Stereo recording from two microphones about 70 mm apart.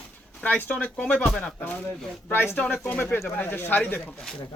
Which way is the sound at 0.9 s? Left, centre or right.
Centre.